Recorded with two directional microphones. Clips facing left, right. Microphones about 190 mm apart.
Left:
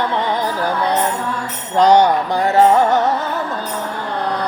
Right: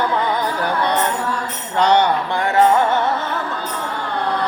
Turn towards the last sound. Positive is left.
turn(degrees=40)  # may be behind; listen again after turning